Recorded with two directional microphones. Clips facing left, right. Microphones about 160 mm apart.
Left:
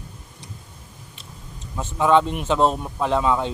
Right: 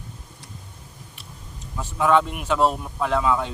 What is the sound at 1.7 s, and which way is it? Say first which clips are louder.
Speech: left 2 dB; 20° left (ahead or behind).